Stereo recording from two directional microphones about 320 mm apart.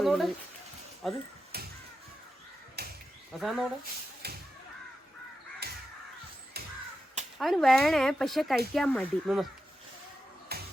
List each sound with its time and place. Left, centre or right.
0.0 s a sound: centre
1.0 s speech: centre
1.5 s a sound: right
2.8 s a sound: right
3.4 s speech: centre
4.2 s speech: right
5.6 s crow: right
7.3 s speech: centre
10.5 s music: right